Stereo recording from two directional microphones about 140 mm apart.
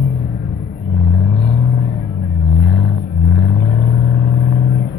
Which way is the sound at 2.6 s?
40° left (ahead or behind).